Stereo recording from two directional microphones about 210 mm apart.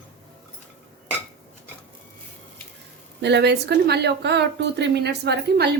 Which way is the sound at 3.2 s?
55° right (ahead or behind).